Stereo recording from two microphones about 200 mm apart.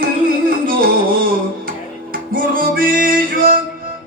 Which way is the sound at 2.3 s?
45° right (ahead or behind).